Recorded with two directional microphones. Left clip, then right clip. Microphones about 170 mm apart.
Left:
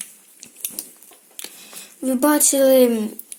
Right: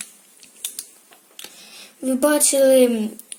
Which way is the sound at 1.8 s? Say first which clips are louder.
Even; centre (ahead or behind).